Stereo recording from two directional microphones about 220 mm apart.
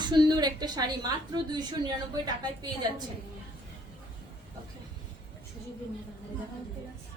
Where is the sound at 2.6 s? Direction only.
20° right (ahead or behind).